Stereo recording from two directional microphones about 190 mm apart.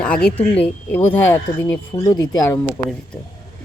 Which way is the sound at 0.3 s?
10° left (ahead or behind).